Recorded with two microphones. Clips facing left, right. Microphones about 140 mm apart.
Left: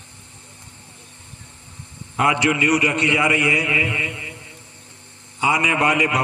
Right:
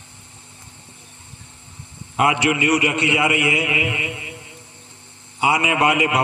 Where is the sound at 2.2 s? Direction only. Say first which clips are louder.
Right 1 dB; 15° right (ahead or behind).